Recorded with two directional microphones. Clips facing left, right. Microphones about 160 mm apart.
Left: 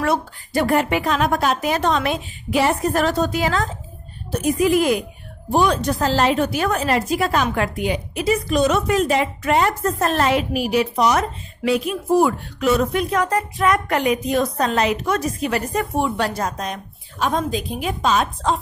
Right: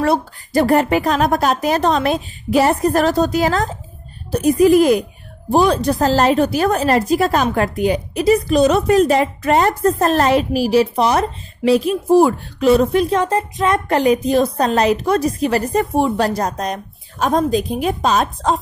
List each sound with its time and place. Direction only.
0.0 s a woman's voice: 35° right (ahead or behind)